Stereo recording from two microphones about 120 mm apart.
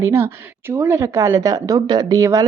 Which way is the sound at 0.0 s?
20° right (ahead or behind).